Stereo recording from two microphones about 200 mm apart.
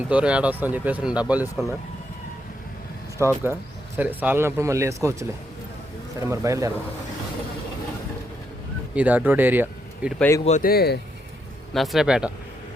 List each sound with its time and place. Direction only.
0.1 s speech: 5° right (ahead or behind)
3.2 s speech: 15° right (ahead or behind)
6.1 s speech: 15° right (ahead or behind)
9.0 s speech: 10° right (ahead or behind)
10.2 s speech: 10° left (ahead or behind)
10.4 s speech: 40° left (ahead or behind)
11.7 s speech: centre (ahead or behind)